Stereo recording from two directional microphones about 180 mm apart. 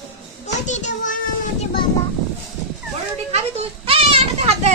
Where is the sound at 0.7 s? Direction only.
40° left (ahead or behind).